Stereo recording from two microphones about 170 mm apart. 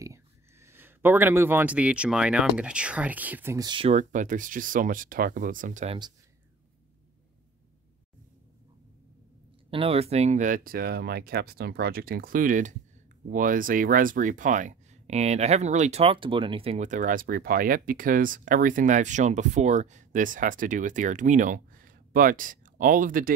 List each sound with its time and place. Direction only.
0.0 s speech: 15° right (ahead or behind)
3.6 s speech: 30° right (ahead or behind)
3.9 s speech: 45° right (ahead or behind)
9.7 s speech: 35° right (ahead or behind); by 23.3 s 55° right (ahead or behind)